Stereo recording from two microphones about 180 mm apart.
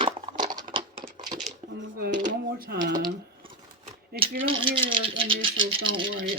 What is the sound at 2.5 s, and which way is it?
Speech, 60° right (ahead or behind).